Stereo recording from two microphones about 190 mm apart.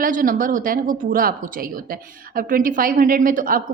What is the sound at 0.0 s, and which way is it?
Speech, 45° right (ahead or behind).